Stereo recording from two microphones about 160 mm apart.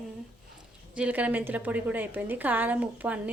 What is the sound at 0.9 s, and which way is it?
Speech, 10° right (ahead or behind).